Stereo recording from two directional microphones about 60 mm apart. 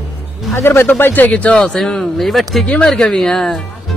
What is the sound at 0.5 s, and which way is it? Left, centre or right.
Speech, left.